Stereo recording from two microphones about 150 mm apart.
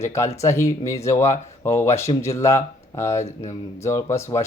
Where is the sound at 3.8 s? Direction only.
20° left (ahead or behind).